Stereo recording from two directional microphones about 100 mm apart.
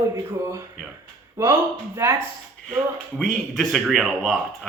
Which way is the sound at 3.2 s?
Centre (ahead or behind).